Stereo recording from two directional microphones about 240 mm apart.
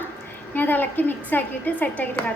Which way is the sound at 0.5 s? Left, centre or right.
Centre.